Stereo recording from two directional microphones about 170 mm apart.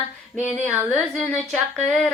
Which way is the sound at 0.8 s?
10° left (ahead or behind).